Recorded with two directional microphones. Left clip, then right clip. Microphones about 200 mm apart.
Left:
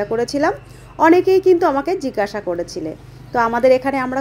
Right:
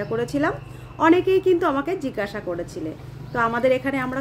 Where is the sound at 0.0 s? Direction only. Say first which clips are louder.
Left 6 dB; 20° left (ahead or behind).